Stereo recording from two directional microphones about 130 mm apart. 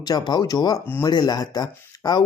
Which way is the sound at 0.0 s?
30° left (ahead or behind).